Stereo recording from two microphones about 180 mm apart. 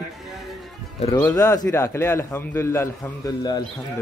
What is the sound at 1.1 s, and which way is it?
A man's voice, 15° left (ahead or behind).